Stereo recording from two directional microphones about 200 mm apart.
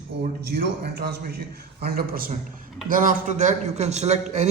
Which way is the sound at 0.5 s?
50° right (ahead or behind).